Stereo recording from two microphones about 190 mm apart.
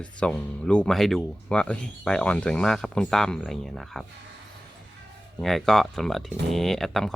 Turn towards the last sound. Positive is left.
turn(degrees=0)  # may be behind; listen again after turning